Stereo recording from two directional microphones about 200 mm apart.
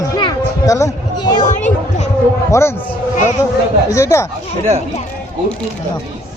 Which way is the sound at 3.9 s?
15° left (ahead or behind).